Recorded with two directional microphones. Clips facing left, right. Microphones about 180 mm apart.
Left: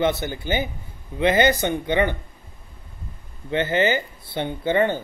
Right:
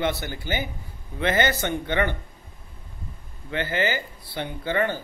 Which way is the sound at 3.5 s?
20° left (ahead or behind).